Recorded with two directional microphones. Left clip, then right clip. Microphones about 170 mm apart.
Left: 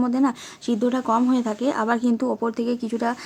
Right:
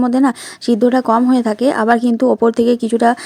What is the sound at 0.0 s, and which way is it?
Speech, 35° right (ahead or behind).